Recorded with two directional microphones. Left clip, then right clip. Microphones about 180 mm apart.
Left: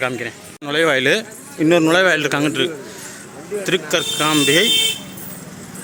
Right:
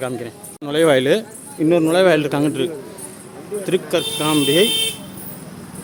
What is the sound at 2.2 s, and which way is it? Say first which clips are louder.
Speech: left 1 dB; 15° right (ahead or behind).